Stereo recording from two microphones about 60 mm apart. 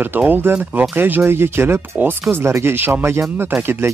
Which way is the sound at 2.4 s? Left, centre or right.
Right.